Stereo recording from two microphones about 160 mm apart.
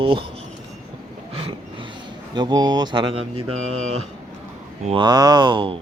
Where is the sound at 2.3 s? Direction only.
25° right (ahead or behind).